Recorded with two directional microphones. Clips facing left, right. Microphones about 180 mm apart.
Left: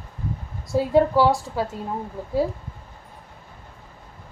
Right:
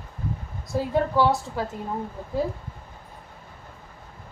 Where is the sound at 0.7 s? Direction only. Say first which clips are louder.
Left 5 dB; 10° left (ahead or behind).